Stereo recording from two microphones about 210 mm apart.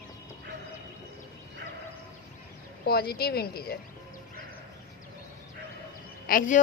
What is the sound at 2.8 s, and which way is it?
Speech, 50° left (ahead or behind).